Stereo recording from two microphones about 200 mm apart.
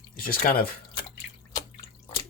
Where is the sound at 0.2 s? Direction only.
45° left (ahead or behind).